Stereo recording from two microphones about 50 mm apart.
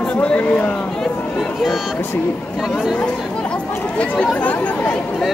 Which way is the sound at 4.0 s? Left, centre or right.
Left.